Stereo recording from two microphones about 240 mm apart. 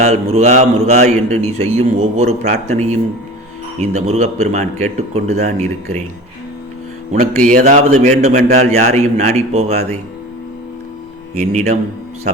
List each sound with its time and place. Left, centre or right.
0.0 s speech: right
7.1 s a man's voice: right
11.3 s speech: right